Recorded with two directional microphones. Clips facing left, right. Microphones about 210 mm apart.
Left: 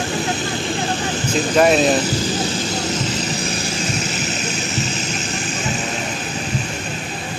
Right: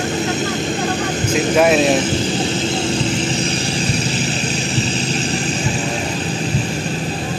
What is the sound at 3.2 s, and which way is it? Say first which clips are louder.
Vehicle: right 4 dB; 30° right (ahead or behind).